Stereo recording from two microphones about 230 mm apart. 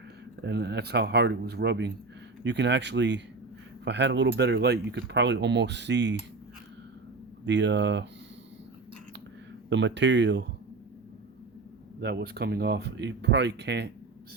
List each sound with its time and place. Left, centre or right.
0.4 s speech: right
7.4 s speech: right
9.6 s speech: right
11.9 s speech: right